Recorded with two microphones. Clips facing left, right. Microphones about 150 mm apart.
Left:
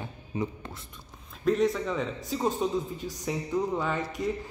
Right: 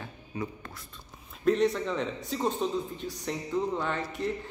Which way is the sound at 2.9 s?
45° left (ahead or behind).